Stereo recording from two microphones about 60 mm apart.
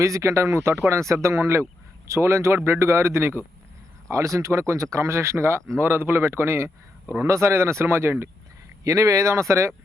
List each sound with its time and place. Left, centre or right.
0.0 s speech: right
4.1 s speech: right
7.1 s speech: right
8.8 s speech: right